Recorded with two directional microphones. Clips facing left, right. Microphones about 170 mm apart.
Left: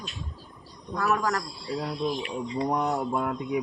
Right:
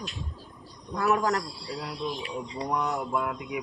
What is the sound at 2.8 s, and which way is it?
Mantra, 35° left (ahead or behind).